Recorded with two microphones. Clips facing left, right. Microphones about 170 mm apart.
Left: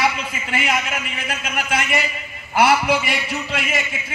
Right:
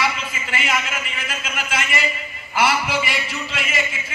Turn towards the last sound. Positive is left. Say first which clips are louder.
# left 4 dB
turn(degrees=55)  # may be behind; listen again after turning